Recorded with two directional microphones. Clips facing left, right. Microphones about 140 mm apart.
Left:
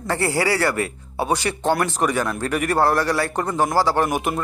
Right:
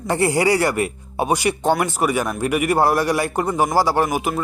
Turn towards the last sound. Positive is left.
turn(degrees=-5)  # may be behind; listen again after turning